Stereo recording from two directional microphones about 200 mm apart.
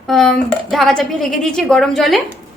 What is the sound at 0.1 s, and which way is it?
A woman's voice, centre (ahead or behind).